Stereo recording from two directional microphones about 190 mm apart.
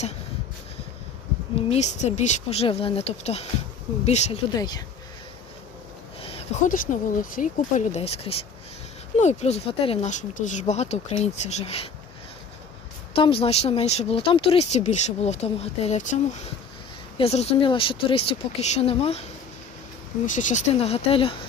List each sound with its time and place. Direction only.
1.5 s speech: 35° left (ahead or behind)
4.5 s speech: 20° left (ahead or behind)
6.1 s a sound: 30° left (ahead or behind)
6.7 s speech: 45° left (ahead or behind)
13.1 s speech: 30° left (ahead or behind)
20.2 s speech: 40° left (ahead or behind)